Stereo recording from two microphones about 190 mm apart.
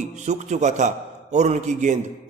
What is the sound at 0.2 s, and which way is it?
A man's voice, 40° right (ahead or behind).